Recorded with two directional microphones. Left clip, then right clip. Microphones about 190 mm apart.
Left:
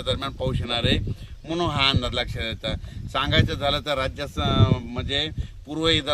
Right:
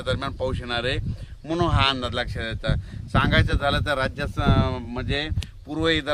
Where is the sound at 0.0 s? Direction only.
Centre (ahead or behind); by 5.3 s 30° left (ahead or behind).